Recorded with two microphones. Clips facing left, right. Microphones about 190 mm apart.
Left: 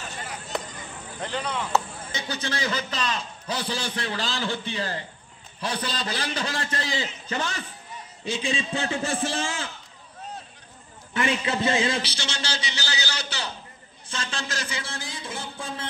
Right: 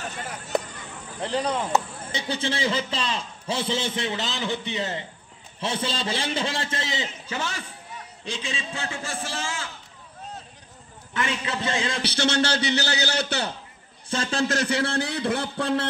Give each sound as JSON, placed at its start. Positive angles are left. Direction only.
{"t": 1.2, "sound": "speech", "side_deg": -35}
{"t": 2.1, "sound": "a man's voice", "side_deg": -30}
{"t": 7.2, "sound": "a man's voice", "side_deg": -10}
{"t": 8.3, "sound": "a man's voice", "side_deg": 15}
{"t": 11.6, "sound": "speech", "side_deg": 5}
{"t": 12.0, "sound": "a man's voice", "side_deg": -60}
{"t": 14.0, "sound": "a man's voice", "side_deg": -40}
{"t": 14.5, "sound": "a man's voice", "side_deg": -60}